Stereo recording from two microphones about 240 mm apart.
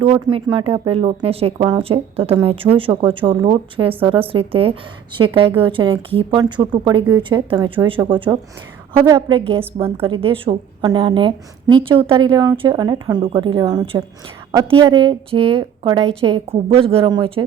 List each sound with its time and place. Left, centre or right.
0.0 s a woman's voice: right